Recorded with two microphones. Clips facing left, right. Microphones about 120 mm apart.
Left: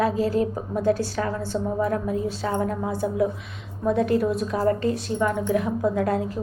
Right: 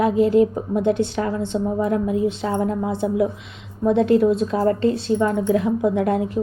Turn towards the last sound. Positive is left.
turn(degrees=-20)  # may be behind; listen again after turning